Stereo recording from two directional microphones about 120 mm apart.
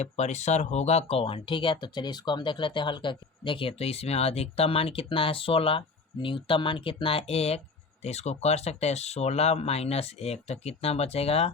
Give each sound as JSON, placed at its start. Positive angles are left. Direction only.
{"t": 0.0, "sound": "speech", "side_deg": 70}